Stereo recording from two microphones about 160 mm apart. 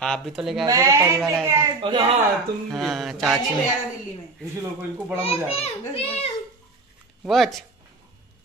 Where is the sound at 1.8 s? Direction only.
40° right (ahead or behind).